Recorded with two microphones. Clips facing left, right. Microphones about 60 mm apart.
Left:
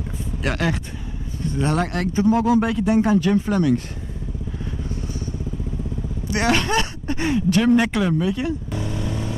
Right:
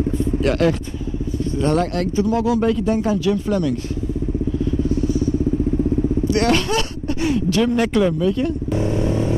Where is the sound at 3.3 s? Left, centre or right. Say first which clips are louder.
Even; left.